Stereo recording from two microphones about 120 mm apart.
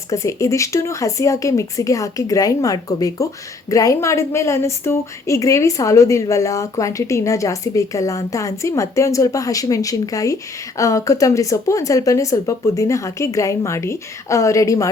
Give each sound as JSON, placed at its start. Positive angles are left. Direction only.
{"t": 0.1, "sound": "a woman's voice", "side_deg": 25}